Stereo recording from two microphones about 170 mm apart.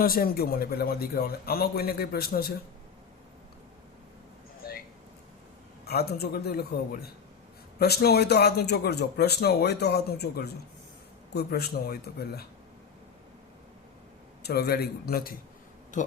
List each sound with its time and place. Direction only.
0.0 s a man's voice: 60° left (ahead or behind)
5.8 s speech: 70° left (ahead or behind)
14.4 s speech: 70° left (ahead or behind)
15.9 s speech: 45° left (ahead or behind)